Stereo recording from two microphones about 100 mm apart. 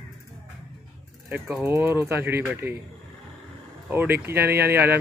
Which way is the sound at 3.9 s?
20° right (ahead or behind).